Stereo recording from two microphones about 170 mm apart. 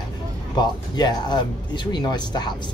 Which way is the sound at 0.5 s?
25° left (ahead or behind).